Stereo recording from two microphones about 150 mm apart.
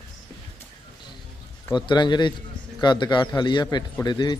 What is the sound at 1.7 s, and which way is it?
Speech, 30° left (ahead or behind).